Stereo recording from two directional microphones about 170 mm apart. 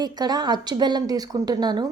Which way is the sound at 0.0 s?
25° right (ahead or behind).